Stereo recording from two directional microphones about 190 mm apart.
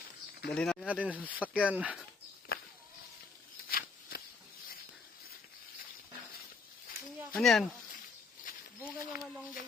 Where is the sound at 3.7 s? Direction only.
50° left (ahead or behind).